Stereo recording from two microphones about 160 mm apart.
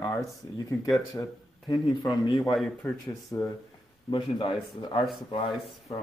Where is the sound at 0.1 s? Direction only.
20° left (ahead or behind).